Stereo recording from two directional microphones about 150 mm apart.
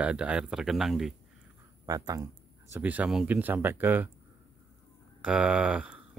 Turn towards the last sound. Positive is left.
turn(degrees=-5)  # may be behind; listen again after turning